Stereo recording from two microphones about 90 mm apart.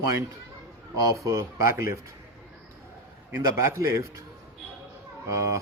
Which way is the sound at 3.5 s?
30° right (ahead or behind).